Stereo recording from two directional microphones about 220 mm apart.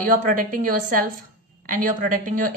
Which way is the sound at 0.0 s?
40° right (ahead or behind).